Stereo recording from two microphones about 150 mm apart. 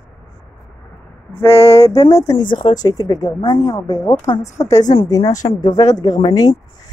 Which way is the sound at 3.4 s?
40° left (ahead or behind).